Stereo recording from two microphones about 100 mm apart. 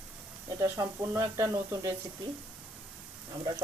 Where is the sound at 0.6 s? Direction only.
30° right (ahead or behind).